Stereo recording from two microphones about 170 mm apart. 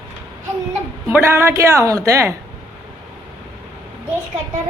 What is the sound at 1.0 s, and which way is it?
Speech, 15° right (ahead or behind).